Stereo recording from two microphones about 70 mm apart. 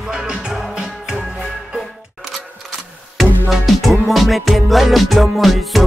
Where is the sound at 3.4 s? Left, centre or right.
Centre.